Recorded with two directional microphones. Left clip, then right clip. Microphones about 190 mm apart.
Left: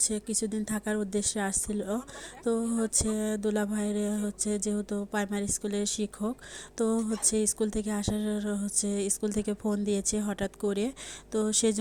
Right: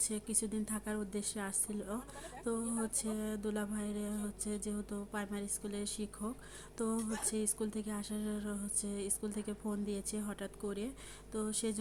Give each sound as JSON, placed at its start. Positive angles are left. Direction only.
{"t": 0.0, "sound": "a woman's voice", "side_deg": 30}